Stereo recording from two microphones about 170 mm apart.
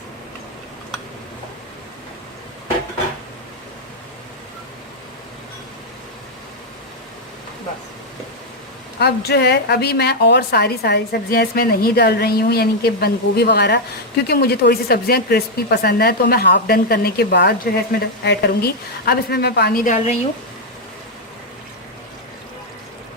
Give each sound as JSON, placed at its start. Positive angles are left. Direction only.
{"t": 9.0, "sound": "a woman's voice", "side_deg": 75}
{"t": 19.8, "sound": "a woman's voice", "side_deg": 45}